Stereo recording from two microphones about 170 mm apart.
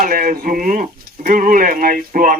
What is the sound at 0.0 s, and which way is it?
Speech, 55° right (ahead or behind).